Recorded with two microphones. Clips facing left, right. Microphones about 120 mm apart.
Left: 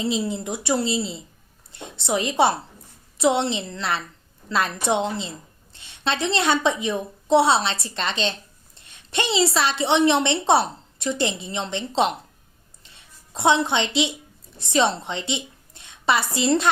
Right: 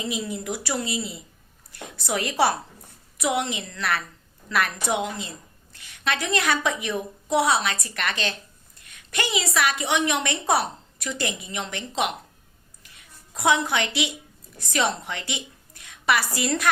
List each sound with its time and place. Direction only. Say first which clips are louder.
0.0 s a woman's voice: left 5 dB; 30° left (ahead or behind)
12.8 s a sound: even; 25° left (ahead or behind)
14.6 s a woman's voice: left 4 dB; 25° left (ahead or behind)